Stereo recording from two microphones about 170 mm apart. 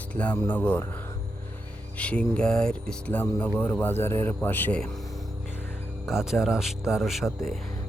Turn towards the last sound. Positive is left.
turn(degrees=0)  # may be behind; listen again after turning